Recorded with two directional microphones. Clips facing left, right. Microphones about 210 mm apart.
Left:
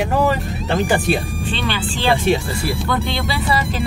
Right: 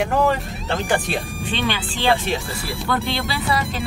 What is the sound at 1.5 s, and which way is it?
Speech, 15° right (ahead or behind).